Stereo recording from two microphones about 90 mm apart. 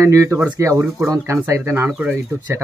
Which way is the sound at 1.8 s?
15° right (ahead or behind).